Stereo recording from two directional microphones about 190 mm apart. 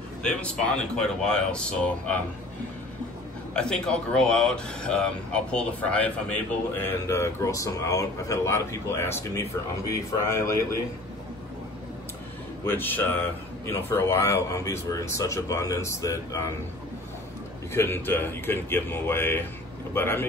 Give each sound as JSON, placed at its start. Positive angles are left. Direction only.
{"t": 0.2, "sound": "speech", "side_deg": 5}
{"t": 3.5, "sound": "a man's voice", "side_deg": 5}
{"t": 12.6, "sound": "a man's voice", "side_deg": 10}
{"t": 17.7, "sound": "a man's voice", "side_deg": 10}